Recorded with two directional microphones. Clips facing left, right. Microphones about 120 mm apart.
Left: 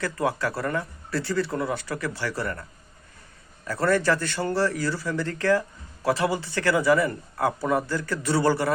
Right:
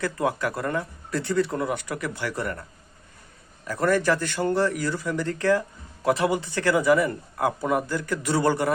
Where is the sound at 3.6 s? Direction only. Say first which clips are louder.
Even; 15° right (ahead or behind).